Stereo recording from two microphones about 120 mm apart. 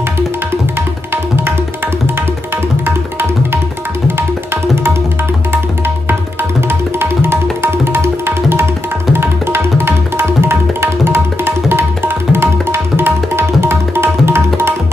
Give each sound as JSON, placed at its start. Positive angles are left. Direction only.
{"t": 6.7, "sound": "tabla", "side_deg": -20}